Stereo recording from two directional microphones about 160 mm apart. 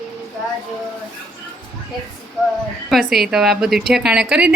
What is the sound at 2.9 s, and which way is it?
A woman's voice, centre (ahead or behind).